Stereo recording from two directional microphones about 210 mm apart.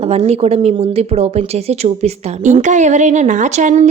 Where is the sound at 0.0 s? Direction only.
30° right (ahead or behind).